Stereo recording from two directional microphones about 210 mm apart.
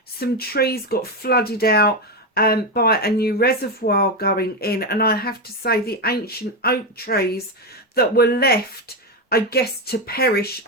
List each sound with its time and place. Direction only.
0.2 s speech: 45° left (ahead or behind)